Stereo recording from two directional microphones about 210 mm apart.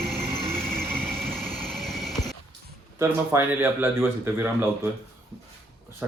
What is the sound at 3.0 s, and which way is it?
Speech, 10° right (ahead or behind).